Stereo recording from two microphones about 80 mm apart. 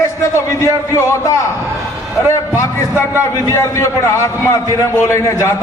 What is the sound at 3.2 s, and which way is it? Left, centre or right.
A man's voice, left.